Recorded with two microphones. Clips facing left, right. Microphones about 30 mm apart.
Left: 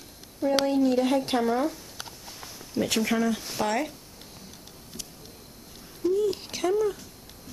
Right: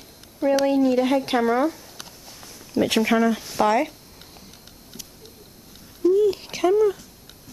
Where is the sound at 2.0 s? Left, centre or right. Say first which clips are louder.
Left 1 dB; centre.